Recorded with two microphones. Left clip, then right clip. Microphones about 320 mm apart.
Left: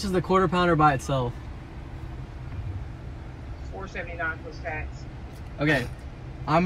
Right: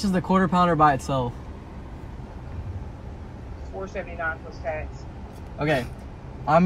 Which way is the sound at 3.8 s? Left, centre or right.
Centre.